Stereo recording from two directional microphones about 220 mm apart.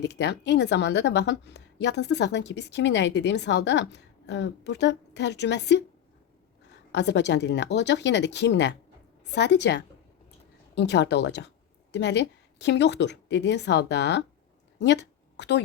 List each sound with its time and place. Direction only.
0.0 s a woman's voice: 50° left (ahead or behind)
6.9 s a woman's voice: 50° left (ahead or behind)